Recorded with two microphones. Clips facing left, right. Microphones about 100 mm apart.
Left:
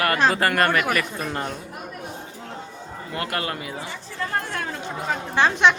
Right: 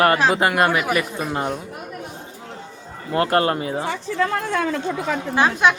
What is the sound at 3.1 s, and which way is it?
Speech, 35° right (ahead or behind).